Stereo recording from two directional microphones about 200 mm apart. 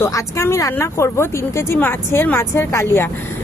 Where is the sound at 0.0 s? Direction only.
15° left (ahead or behind).